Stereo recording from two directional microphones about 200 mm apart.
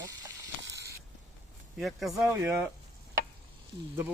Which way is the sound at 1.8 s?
Centre (ahead or behind).